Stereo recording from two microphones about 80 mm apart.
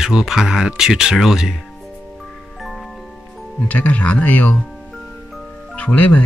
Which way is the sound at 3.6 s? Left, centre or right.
Centre.